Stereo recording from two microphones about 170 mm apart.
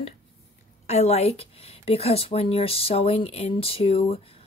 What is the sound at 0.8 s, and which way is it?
Speech, 40° left (ahead or behind).